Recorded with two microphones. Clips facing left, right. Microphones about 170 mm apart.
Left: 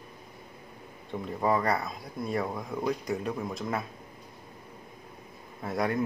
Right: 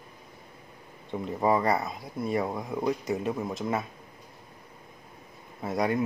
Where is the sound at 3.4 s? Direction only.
Centre (ahead or behind).